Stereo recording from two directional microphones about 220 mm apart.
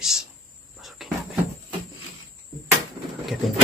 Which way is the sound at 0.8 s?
Centre (ahead or behind).